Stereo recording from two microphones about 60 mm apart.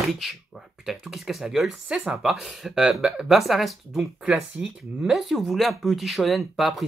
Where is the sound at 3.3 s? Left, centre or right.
Centre.